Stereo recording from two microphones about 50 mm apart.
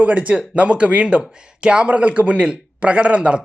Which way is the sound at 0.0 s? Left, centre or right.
Right.